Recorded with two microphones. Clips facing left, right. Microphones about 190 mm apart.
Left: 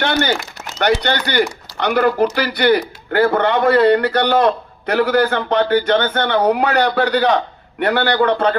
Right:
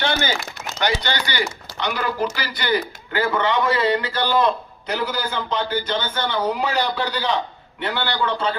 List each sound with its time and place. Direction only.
0.0 s a man's voice: 60° left (ahead or behind)